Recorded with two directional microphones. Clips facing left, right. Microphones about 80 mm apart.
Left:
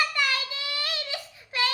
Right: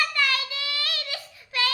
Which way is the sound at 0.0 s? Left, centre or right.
Centre.